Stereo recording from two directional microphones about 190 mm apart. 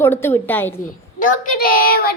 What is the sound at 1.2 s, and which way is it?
Speech, 50° left (ahead or behind).